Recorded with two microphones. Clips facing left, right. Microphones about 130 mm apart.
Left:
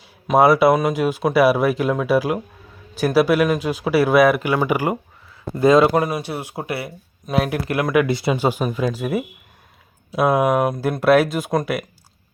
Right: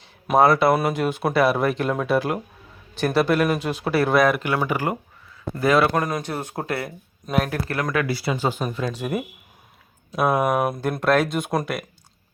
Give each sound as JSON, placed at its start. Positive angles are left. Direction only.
{"t": 0.3, "sound": "speech", "side_deg": 5}
{"t": 5.5, "sound": "a man's voice", "side_deg": 20}
{"t": 5.9, "sound": "speech", "side_deg": 10}
{"t": 8.0, "sound": "speech", "side_deg": 20}